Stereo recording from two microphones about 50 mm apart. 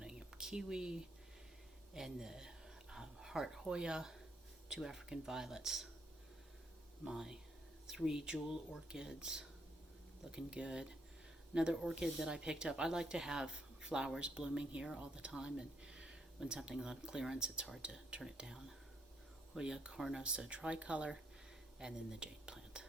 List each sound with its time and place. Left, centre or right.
0.0 s a sound: centre
4.7 s speech: centre
7.0 s a woman's voice: centre
21.8 s speech: centre